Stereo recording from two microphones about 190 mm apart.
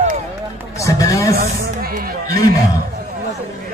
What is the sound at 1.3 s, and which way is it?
Music, 50° right (ahead or behind).